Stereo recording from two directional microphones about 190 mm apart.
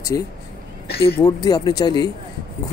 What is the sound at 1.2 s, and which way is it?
Speech, 20° left (ahead or behind).